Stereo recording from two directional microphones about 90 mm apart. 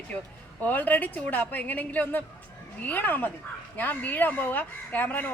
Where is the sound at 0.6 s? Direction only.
20° left (ahead or behind).